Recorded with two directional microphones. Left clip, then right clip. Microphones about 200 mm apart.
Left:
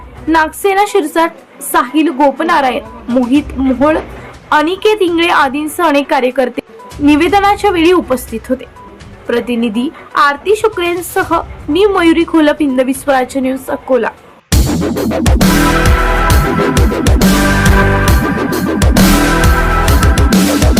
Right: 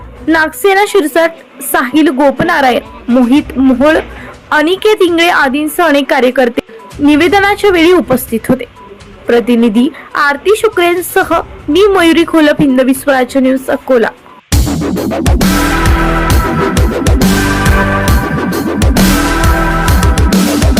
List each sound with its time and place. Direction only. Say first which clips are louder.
0.3 s a woman's voice: right 2 dB; 20° right (ahead or behind)
14.5 s music: even; centre (ahead or behind)